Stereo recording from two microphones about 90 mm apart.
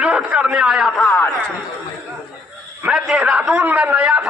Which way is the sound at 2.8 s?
10° right (ahead or behind).